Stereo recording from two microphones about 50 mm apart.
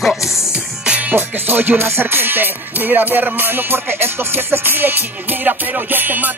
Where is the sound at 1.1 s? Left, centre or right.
Right.